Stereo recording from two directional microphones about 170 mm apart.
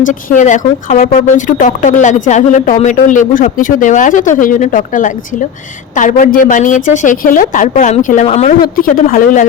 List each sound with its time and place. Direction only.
0.0 s speech: 50° left (ahead or behind)
8.8 s speech: 55° left (ahead or behind)